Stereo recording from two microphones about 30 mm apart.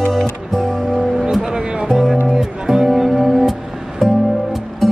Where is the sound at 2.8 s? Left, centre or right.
Centre.